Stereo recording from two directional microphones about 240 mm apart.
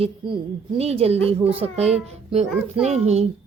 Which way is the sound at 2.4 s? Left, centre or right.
Centre.